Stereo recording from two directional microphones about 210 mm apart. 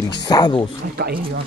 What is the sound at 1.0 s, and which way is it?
Speech, 50° right (ahead or behind).